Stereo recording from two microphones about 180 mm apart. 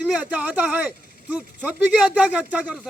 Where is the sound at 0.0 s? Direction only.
10° right (ahead or behind).